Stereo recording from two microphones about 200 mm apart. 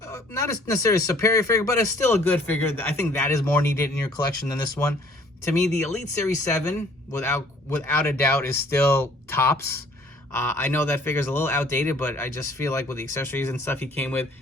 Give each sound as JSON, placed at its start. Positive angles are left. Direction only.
{"t": 0.0, "sound": "a man's voice", "side_deg": 15}
{"t": 6.2, "sound": "a man's voice", "side_deg": 10}